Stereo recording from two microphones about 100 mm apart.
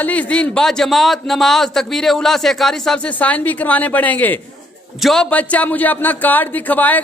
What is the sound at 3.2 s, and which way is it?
Speech, 15° left (ahead or behind).